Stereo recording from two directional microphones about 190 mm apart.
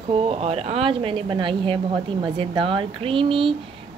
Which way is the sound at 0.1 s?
30° right (ahead or behind).